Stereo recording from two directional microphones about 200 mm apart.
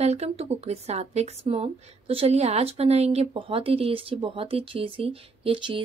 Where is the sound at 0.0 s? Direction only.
35° right (ahead or behind).